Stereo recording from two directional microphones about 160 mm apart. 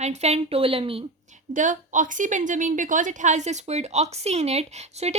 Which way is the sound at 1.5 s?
55° right (ahead or behind).